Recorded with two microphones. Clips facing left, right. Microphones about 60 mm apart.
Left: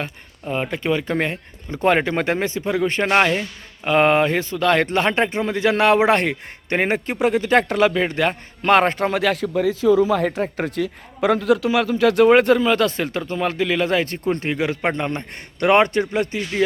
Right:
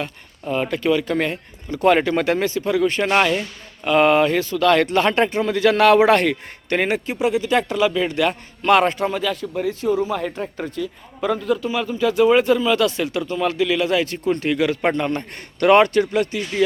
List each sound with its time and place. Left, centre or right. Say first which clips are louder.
0.5 s speech: right 2 dB; left
3.1 s speech: left 1 dB; left
8.0 s a man's voice: even; left
9.1 s a man's voice: left 4 dB; left